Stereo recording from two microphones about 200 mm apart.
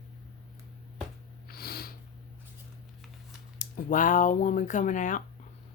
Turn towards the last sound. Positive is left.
turn(degrees=40)  # may be behind; listen again after turning